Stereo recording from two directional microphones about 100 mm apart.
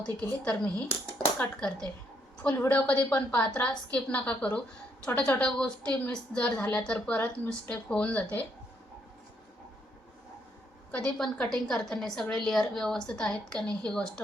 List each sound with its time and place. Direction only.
0.0 s a woman's voice: 10° left (ahead or behind)
10.9 s a woman's voice: 10° left (ahead or behind)